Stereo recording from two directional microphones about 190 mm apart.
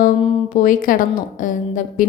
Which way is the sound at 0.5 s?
45° left (ahead or behind).